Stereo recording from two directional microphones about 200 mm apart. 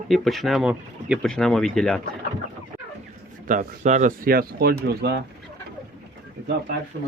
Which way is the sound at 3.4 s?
40° right (ahead or behind).